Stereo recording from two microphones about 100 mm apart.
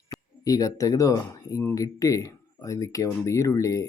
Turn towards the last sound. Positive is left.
turn(degrees=30)  # may be behind; listen again after turning